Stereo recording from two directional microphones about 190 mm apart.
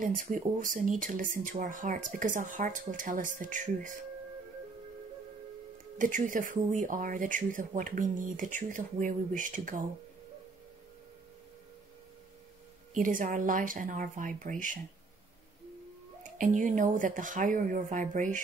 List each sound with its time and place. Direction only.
0.2 s speech: 45° right (ahead or behind)
5.9 s speech: 45° right (ahead or behind)
12.9 s speech: 45° right (ahead or behind)
16.2 s speech: 45° right (ahead or behind)